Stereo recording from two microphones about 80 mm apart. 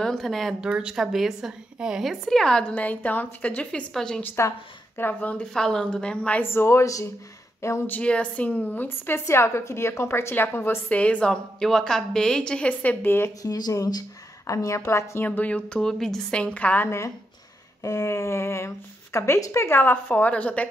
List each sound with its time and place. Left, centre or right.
0.0 s a woman's voice: centre
0.6 s a woman's voice: centre
4.9 s a woman's voice: left
5.5 s a woman's voice: centre
6.4 s a sound: left
7.8 s a woman's voice: centre
10.9 s a woman's voice: centre
13.4 s a woman's voice: left
15.2 s a woman's voice: centre
17.8 s a sound: left
19.8 s a woman's voice: left